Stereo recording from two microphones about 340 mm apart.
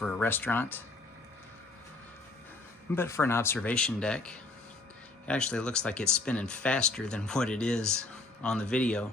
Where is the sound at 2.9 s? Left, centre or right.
Centre.